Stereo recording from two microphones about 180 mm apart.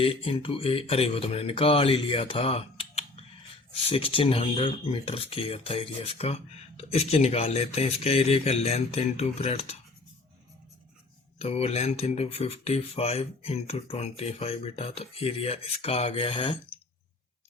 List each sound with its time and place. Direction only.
0.0 s speech: 30° left (ahead or behind)
11.3 s speech: 35° left (ahead or behind)